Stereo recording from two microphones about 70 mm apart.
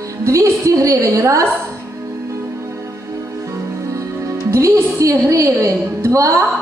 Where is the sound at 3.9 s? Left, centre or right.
Right.